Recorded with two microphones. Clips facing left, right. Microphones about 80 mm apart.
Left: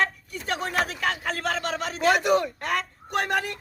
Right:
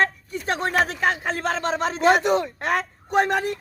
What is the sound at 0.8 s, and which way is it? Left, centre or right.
Speech, right.